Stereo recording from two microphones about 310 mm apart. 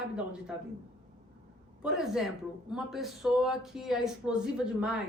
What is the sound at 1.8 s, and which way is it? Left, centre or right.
Speech, centre.